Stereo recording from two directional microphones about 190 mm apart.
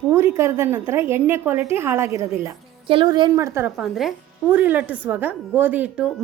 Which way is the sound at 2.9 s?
25° right (ahead or behind).